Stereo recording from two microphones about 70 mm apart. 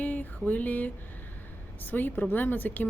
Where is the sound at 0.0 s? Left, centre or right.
Left.